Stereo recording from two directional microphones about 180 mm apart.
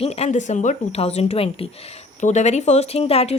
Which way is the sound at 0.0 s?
35° left (ahead or behind).